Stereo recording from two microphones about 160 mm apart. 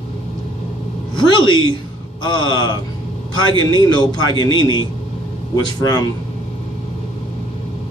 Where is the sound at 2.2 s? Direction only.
30° left (ahead or behind).